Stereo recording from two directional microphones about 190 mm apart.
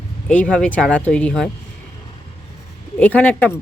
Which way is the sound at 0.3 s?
5° left (ahead or behind).